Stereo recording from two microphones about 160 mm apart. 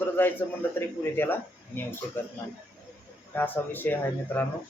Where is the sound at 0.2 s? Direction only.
10° left (ahead or behind).